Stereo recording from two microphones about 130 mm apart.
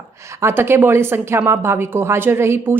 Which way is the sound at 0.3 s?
20° right (ahead or behind).